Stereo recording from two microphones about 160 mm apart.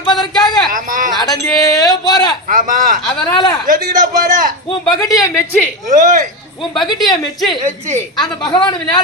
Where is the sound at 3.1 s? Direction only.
25° left (ahead or behind).